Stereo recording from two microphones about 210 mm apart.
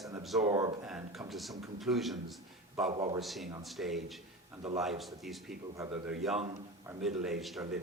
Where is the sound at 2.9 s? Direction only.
25° right (ahead or behind).